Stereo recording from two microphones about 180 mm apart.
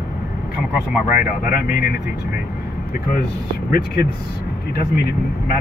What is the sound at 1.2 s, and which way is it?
Speech, 50° left (ahead or behind).